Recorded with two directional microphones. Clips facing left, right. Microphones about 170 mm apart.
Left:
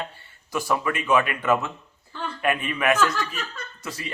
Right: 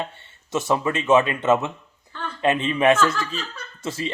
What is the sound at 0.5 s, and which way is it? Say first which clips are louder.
A man's voice: right 3 dB; 25° right (ahead or behind).